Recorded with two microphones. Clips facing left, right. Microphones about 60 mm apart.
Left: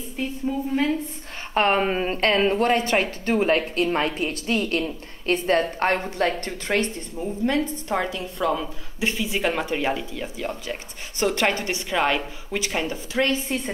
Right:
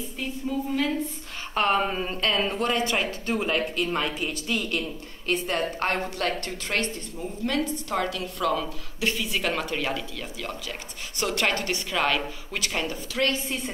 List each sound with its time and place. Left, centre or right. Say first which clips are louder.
1.5 s a woman's voice: left 3 dB; left